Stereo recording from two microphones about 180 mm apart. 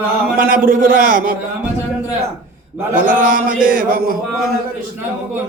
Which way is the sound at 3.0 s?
50° right (ahead or behind).